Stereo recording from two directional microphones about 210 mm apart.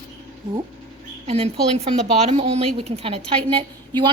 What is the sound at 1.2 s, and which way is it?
A woman's voice, 30° right (ahead or behind).